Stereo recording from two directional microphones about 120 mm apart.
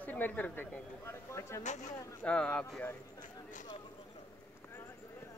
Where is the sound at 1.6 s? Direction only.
80° left.